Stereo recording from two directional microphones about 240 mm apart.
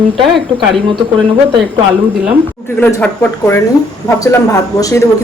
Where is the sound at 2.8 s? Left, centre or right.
Centre.